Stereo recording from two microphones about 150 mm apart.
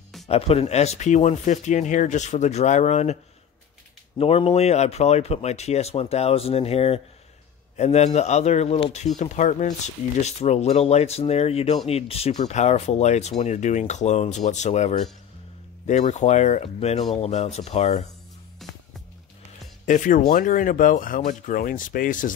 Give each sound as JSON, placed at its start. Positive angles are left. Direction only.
{"t": 0.3, "sound": "speech", "side_deg": 40}
{"t": 4.2, "sound": "speech", "side_deg": 40}
{"t": 19.9, "sound": "speech", "side_deg": 55}